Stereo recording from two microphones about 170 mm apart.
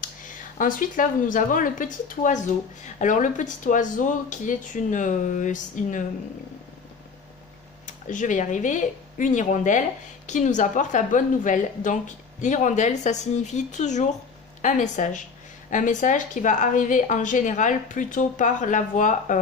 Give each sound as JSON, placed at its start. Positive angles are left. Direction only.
{"t": 0.6, "sound": "speech", "side_deg": 50}
{"t": 7.8, "sound": "speech", "side_deg": 50}